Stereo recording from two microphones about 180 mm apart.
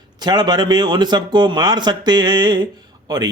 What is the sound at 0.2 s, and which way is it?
A man's voice, 25° right (ahead or behind).